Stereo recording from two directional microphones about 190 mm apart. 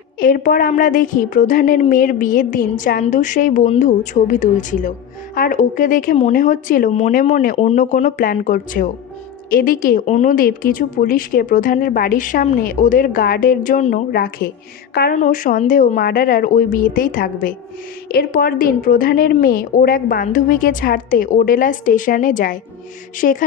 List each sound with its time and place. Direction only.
0.2 s a woman's voice: 45° left (ahead or behind)